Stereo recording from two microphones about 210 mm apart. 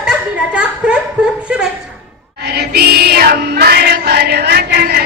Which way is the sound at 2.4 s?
50° right (ahead or behind).